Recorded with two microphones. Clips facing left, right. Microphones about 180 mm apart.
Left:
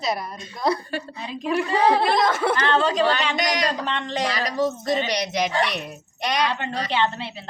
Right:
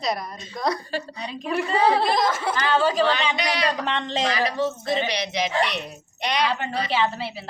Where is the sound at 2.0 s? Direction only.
60° left (ahead or behind).